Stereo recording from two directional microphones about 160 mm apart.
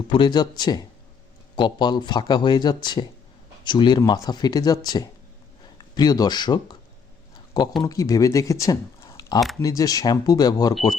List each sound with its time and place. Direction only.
0.1 s speech: 30° left (ahead or behind)
7.8 s speech: 20° left (ahead or behind)